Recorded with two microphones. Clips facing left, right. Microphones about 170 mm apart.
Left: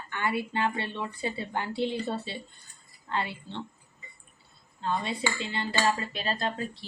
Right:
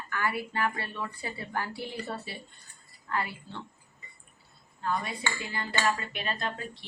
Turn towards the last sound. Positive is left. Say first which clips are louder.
# left 4 dB
turn(degrees=35)  # may be behind; listen again after turning